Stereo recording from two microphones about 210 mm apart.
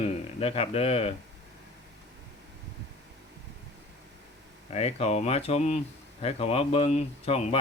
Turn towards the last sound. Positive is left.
turn(degrees=30)  # may be behind; listen again after turning